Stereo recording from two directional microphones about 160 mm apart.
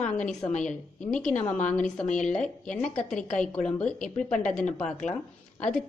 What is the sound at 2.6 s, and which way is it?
A woman's voice, 5° left (ahead or behind).